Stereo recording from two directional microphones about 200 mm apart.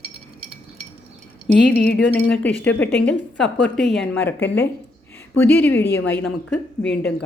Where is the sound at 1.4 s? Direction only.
55° left (ahead or behind).